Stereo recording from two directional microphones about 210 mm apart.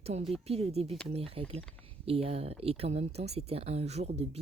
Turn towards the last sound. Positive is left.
turn(degrees=-30)  # may be behind; listen again after turning